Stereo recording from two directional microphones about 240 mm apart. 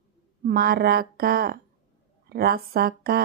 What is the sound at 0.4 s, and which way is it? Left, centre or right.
A woman's voice, right.